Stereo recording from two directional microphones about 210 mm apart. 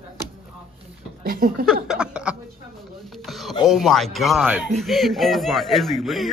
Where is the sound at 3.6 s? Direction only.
Centre (ahead or behind).